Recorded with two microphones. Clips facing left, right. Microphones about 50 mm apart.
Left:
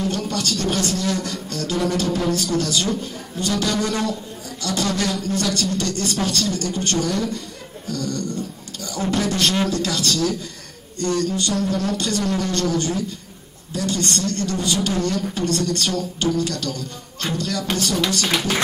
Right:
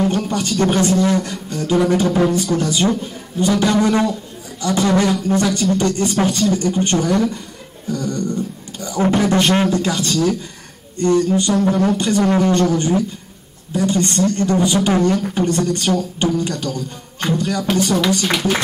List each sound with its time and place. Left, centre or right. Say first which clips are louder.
0.1 s speech: right 4 dB; right